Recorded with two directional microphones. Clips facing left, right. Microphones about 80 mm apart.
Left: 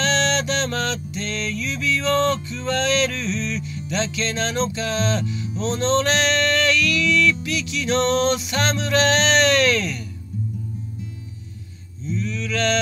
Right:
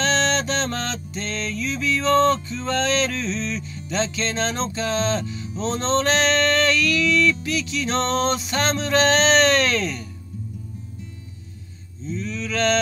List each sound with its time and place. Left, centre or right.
0.0 s music: right
12.0 s speech: right